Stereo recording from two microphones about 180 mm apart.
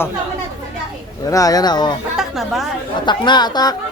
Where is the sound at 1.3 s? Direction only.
20° left (ahead or behind).